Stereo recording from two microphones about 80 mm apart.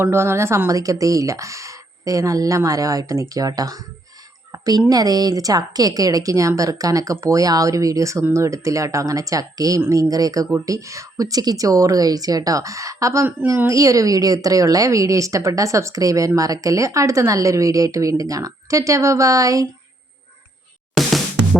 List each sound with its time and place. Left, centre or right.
0.0 s a woman's voice: right
4.5 s a sound: right
4.9 s a woman's voice: right